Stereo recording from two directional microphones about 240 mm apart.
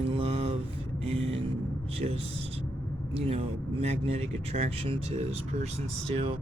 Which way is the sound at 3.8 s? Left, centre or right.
Right.